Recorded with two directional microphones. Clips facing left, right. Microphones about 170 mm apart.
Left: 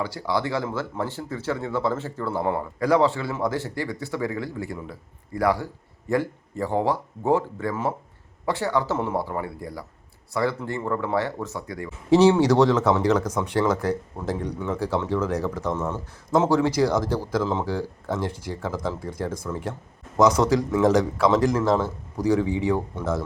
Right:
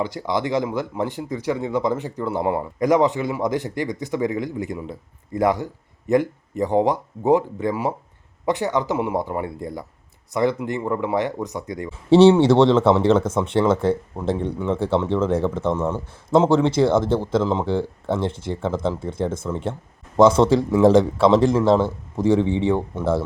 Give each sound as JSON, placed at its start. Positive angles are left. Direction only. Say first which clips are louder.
{"t": 0.0, "sound": "speech", "louder": "right 2 dB", "side_deg": -20}